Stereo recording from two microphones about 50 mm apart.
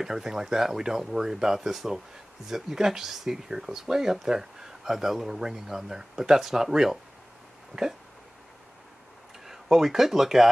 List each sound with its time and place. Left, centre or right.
0.0 s speech: centre
9.5 s speech: centre